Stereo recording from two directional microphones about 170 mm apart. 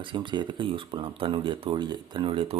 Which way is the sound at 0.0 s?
30° right (ahead or behind).